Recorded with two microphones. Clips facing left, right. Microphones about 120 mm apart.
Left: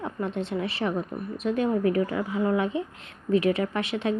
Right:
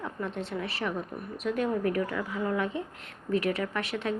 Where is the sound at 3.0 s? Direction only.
50° right (ahead or behind).